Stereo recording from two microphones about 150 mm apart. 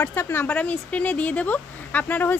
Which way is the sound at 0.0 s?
15° left (ahead or behind).